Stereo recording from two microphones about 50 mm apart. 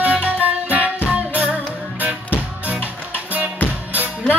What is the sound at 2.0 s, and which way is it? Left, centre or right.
Music, right.